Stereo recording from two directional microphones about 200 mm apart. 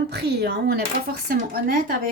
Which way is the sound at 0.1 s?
55° right (ahead or behind).